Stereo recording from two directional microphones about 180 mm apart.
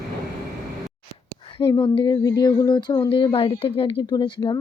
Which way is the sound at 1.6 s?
25° left (ahead or behind).